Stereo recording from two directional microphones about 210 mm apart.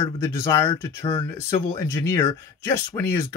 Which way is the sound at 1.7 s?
15° left (ahead or behind).